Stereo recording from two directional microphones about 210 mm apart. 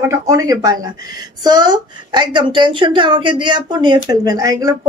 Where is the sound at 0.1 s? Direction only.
15° right (ahead or behind).